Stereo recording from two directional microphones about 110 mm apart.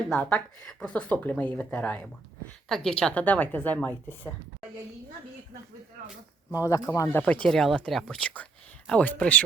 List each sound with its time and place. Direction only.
0.1 s speech: 10° left (ahead or behind)
6.5 s speech: 30° left (ahead or behind)
7.2 s speech: 10° left (ahead or behind)